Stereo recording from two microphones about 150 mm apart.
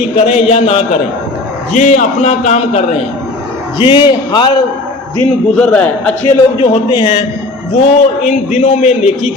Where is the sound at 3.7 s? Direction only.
35° left (ahead or behind).